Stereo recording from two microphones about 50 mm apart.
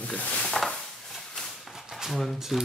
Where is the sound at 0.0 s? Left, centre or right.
Left.